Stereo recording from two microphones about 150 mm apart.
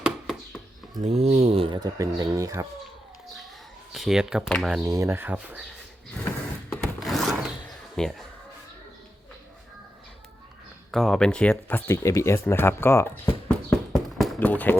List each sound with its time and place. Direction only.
0.0 s a sound: centre (ahead or behind)
1.0 s speech: 50° right (ahead or behind); by 2.6 s 20° right (ahead or behind)
3.9 s speech: centre (ahead or behind)
4.8 s speech: 20° right (ahead or behind)
6.7 s wood: centre (ahead or behind)
10.9 s speech: centre (ahead or behind)